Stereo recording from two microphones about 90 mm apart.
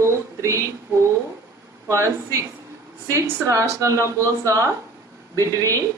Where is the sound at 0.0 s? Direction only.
35° right (ahead or behind).